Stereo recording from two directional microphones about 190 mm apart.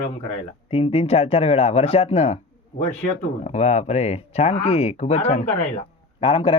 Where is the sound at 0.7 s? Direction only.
30° left (ahead or behind).